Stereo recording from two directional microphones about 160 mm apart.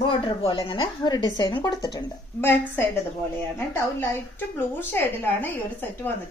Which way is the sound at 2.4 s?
15° left (ahead or behind).